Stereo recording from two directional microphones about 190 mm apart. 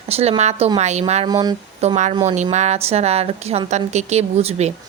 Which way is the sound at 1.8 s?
35° right (ahead or behind).